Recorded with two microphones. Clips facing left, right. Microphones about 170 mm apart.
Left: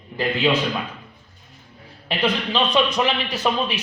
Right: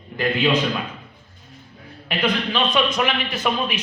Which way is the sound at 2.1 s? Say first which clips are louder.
Even; 30° left (ahead or behind).